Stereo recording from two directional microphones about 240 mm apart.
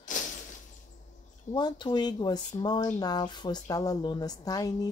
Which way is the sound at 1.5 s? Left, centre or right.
Centre.